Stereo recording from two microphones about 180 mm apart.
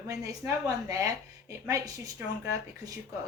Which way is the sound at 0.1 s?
20° right (ahead or behind).